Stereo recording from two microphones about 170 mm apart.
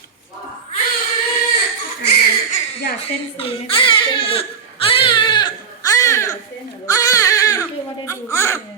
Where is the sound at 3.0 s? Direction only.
35° left (ahead or behind).